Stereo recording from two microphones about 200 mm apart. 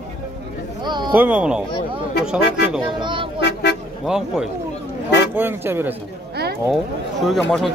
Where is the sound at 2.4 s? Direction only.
55° left (ahead or behind).